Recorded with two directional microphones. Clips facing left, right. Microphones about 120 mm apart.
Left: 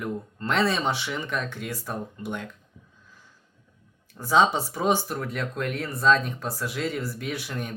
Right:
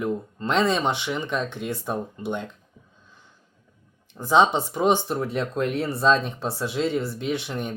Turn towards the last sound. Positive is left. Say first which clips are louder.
# right 5 dB
turn(degrees=-25)  # may be behind; listen again after turning